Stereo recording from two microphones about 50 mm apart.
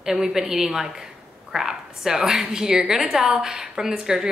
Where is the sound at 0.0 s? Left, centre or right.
Centre.